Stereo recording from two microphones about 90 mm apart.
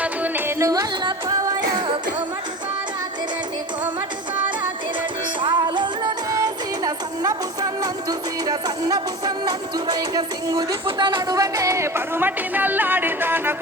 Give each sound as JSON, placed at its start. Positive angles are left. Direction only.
{"t": 0.0, "sound": "music", "side_deg": -20}
{"t": 0.6, "sound": "music", "side_deg": -45}
{"t": 5.4, "sound": "music", "side_deg": -60}
{"t": 6.3, "sound": "music", "side_deg": -45}
{"t": 10.8, "sound": "speech", "side_deg": -60}